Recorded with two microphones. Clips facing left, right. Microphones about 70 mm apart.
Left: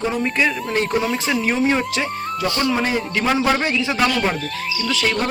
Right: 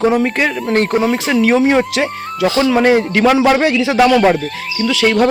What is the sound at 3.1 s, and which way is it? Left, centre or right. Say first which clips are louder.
A man's voice: right 7 dB; right.